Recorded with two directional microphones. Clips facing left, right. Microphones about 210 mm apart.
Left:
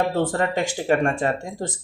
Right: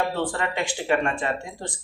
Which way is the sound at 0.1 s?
40° left (ahead or behind).